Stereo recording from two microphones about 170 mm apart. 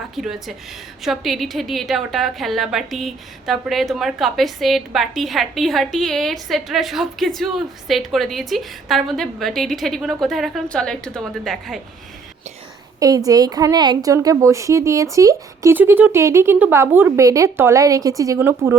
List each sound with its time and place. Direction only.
0.2 s a woman's voice: centre (ahead or behind)
13.0 s a woman's voice: 20° right (ahead or behind)